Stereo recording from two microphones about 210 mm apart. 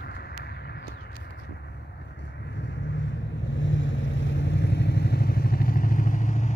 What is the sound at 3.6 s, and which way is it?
Vehicle, 60° left (ahead or behind).